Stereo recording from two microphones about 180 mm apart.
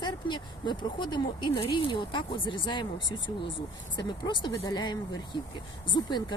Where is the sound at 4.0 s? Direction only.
25° left (ahead or behind).